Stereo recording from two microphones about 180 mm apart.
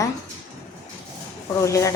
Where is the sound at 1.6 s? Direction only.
15° left (ahead or behind).